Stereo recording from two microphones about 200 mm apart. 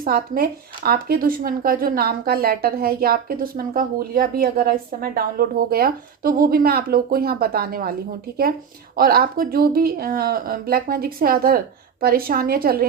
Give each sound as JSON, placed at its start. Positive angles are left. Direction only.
{"t": 0.0, "sound": "speech", "side_deg": -45}
{"t": 9.0, "sound": "speech", "side_deg": -50}